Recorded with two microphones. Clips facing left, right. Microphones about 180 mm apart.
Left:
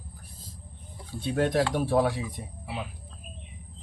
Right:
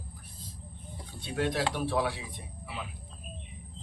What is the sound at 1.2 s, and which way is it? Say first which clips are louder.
Speech: left 5 dB; 50° left (ahead or behind).